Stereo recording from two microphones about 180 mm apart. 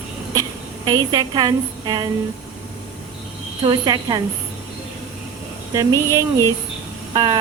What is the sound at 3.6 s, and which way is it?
Speech, 25° right (ahead or behind).